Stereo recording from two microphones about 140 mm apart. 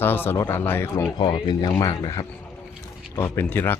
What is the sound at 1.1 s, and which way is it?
Speech, 35° left (ahead or behind).